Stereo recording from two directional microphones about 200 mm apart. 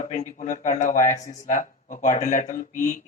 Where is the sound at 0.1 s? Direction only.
35° left (ahead or behind).